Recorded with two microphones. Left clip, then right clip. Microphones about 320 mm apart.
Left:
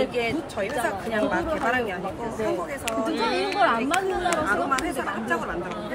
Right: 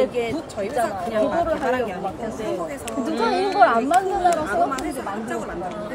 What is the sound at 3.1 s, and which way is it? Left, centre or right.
Speech, right.